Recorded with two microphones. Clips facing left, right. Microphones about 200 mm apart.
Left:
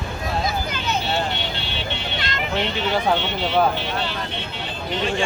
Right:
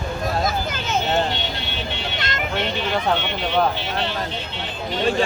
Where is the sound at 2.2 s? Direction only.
45° right (ahead or behind).